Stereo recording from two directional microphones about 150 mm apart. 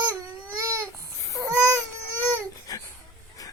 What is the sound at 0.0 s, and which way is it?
Baby cry, 25° right (ahead or behind).